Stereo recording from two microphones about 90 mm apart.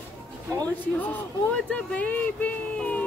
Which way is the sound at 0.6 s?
20° left (ahead or behind).